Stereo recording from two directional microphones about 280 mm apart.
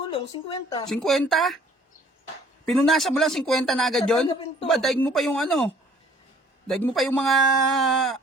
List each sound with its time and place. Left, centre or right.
0.1 s a woman's voice: centre
0.9 s speech: centre
2.6 s speech: centre
6.7 s speech: centre